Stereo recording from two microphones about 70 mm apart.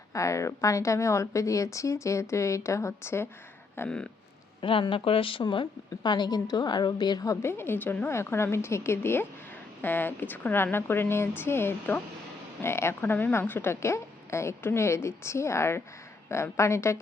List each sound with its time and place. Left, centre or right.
0.1 s a woman's voice: left
3.8 s speech: centre
5.4 s speech: left
6.0 s a woman's voice: left
7.3 s a woman's voice: left